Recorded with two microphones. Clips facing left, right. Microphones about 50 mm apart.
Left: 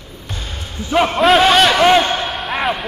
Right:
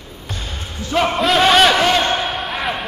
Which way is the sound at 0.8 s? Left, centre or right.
Centre.